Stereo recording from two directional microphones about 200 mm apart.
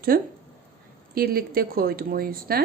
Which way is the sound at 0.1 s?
45° right (ahead or behind).